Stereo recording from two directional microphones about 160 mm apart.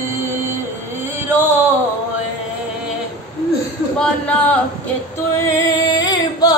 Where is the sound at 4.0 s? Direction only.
5° left (ahead or behind).